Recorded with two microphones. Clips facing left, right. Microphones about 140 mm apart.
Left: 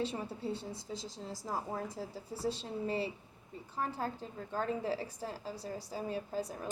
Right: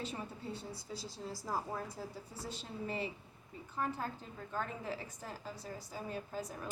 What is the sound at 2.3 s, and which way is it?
A woman's voice, 30° left (ahead or behind).